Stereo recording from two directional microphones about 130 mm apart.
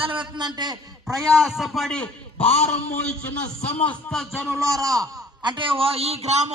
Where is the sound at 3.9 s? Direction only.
10° left (ahead or behind).